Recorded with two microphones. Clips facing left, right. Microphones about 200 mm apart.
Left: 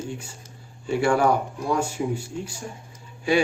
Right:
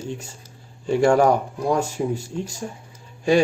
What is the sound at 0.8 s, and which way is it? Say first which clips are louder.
Speech: right 4 dB; 40° right (ahead or behind).